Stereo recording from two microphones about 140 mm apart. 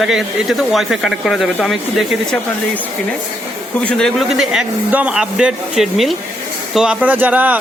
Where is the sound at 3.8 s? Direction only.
5° left (ahead or behind).